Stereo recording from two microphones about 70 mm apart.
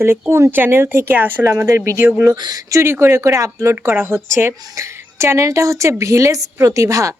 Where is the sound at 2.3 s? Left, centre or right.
Right.